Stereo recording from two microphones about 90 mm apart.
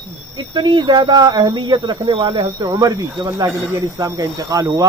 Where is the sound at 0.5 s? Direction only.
55° right (ahead or behind).